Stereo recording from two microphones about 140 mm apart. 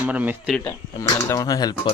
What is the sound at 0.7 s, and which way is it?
Speech, 20° left (ahead or behind).